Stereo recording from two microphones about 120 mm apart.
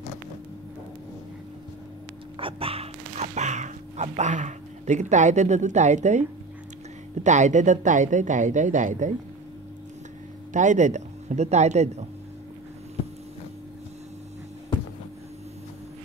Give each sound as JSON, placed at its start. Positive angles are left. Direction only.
{"t": 2.3, "sound": "speech", "side_deg": -50}
{"t": 7.2, "sound": "speech", "side_deg": -90}
{"t": 10.5, "sound": "speech", "side_deg": -90}